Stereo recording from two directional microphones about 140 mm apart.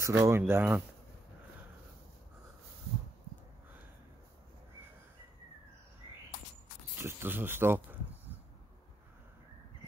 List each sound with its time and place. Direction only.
0.0 s speech: 20° right (ahead or behind)
7.0 s speech: 15° right (ahead or behind)